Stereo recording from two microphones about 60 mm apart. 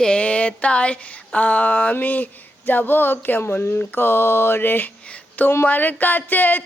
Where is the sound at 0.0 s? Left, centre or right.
Centre.